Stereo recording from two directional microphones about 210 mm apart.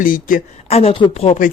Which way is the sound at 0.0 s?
40° left (ahead or behind).